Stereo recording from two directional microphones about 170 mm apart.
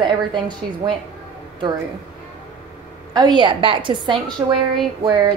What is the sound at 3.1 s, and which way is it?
A woman's voice, 25° right (ahead or behind).